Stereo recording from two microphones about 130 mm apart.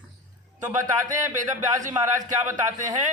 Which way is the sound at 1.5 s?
75° right (ahead or behind).